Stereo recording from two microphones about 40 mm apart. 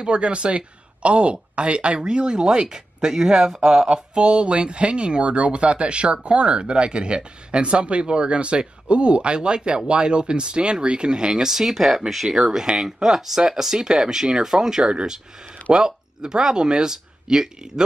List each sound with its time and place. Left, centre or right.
0.0 s speech: right; by 3.9 s centre
3.9 s speech: right
14.9 s speech: right